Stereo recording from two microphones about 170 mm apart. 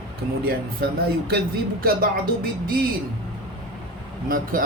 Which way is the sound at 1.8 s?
60° right (ahead or behind).